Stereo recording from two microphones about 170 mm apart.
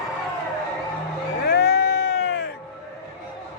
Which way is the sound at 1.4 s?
70° left (ahead or behind).